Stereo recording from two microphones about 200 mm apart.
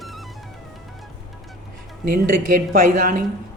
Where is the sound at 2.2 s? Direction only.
45° right (ahead or behind).